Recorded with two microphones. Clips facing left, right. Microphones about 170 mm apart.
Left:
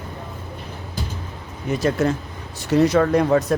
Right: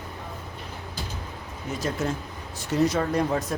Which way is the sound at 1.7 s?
75° left (ahead or behind).